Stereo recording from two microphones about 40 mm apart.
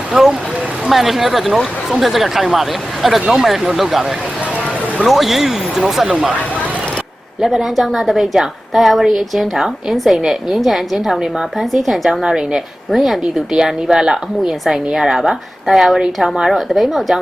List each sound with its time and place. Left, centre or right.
0.1 s a woman's voice: centre
5.0 s speech: centre
7.4 s a woman's voice: centre
12.2 s speech: centre
12.9 s a woman's voice: centre
13.5 s speech: centre
16.0 s speech: centre
16.5 s a woman's voice: centre